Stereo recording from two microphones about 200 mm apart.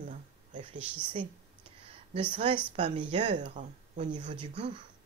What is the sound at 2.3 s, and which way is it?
A woman's voice, 30° right (ahead or behind).